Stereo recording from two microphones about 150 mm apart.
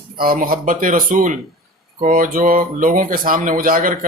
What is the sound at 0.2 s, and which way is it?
A man's voice, 70° right (ahead or behind).